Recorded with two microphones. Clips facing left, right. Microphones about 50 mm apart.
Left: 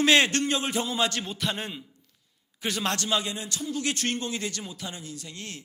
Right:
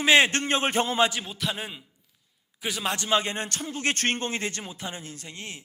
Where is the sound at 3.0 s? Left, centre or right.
Right.